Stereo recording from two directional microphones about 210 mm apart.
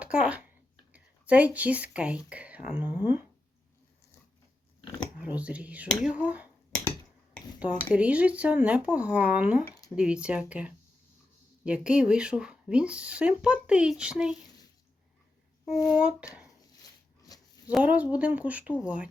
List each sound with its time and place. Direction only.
0.0 s speech: 5° right (ahead or behind)
5.2 s speech: 5° right (ahead or behind)
7.9 s speech: 5° right (ahead or behind)
9.6 s a sound: 15° left (ahead or behind)
9.9 s speech: 5° right (ahead or behind)
15.7 s speech: 15° left (ahead or behind)
17.3 s a sound: 15° left (ahead or behind)
17.7 s speech: 5° right (ahead or behind)